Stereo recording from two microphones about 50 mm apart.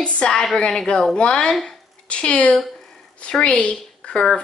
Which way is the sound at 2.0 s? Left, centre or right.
Left.